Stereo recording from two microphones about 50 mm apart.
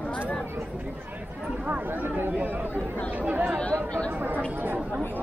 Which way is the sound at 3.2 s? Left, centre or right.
Right.